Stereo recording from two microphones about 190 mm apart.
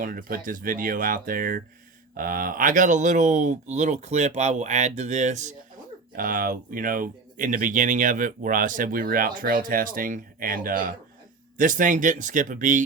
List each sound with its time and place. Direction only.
0.0 s speech: 50° right (ahead or behind)